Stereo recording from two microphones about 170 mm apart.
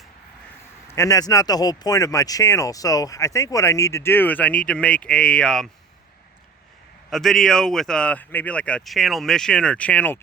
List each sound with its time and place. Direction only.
0.9 s speech: 15° left (ahead or behind)
7.1 s speech: centre (ahead or behind)